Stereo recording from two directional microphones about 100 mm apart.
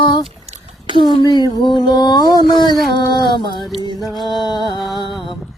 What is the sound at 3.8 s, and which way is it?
Music, 50° left (ahead or behind).